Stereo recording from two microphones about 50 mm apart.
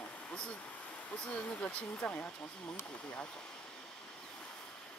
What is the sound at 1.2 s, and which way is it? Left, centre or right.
Speech, left.